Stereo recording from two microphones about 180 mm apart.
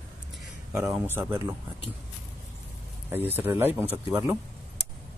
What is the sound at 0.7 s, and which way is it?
Speech, 15° right (ahead or behind).